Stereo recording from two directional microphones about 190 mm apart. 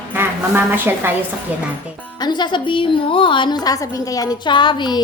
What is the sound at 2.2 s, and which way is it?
A woman's voice, 25° left (ahead or behind).